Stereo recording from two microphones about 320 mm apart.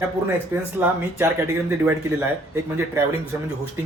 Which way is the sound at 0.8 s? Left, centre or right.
Centre.